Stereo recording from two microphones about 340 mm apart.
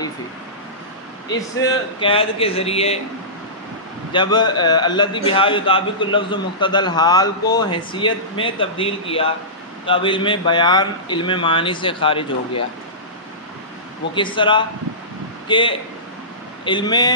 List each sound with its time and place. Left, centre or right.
1.3 s a man's voice: centre
4.1 s a man's voice: centre
14.1 s a man's voice: centre